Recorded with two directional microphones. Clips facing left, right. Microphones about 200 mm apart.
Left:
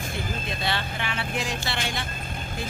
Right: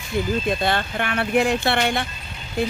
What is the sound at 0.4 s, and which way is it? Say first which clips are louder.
Speech: right 7 dB; 50° right (ahead or behind).